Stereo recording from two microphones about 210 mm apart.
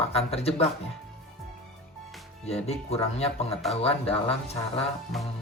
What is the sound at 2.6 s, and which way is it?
Speech, 30° left (ahead or behind).